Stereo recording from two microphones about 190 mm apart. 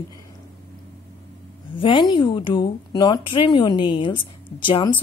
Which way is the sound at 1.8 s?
25° left (ahead or behind).